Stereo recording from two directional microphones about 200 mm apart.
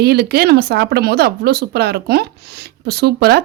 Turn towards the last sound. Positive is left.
turn(degrees=-55)  # may be behind; listen again after turning